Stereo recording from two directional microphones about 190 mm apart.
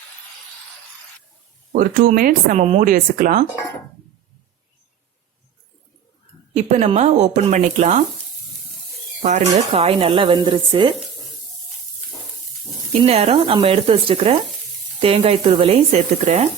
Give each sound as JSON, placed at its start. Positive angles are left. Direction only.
{"t": 1.7, "sound": "speech", "side_deg": -45}
{"t": 6.7, "sound": "speech", "side_deg": -35}
{"t": 9.2, "sound": "speech", "side_deg": -35}
{"t": 13.0, "sound": "speech", "side_deg": -35}